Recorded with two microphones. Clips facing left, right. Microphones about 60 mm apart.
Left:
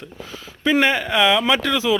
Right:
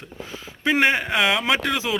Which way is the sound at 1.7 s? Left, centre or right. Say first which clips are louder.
Left 5 dB; right.